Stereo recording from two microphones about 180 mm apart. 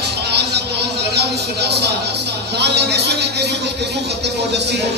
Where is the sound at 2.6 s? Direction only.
65° right (ahead or behind).